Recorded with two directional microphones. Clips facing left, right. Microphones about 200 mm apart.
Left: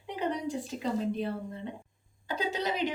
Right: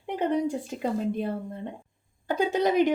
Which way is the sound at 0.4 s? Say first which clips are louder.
Right 4 dB; 50° right (ahead or behind).